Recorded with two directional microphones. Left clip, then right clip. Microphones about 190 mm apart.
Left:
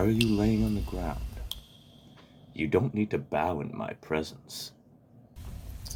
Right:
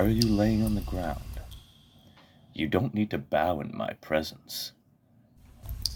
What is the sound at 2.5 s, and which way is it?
Speech, 30° right (ahead or behind).